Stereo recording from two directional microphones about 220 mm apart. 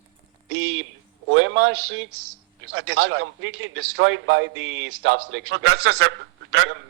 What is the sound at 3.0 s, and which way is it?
A man's voice, 65° right (ahead or behind).